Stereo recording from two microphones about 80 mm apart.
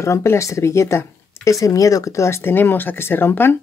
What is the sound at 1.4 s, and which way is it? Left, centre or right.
Speech, left.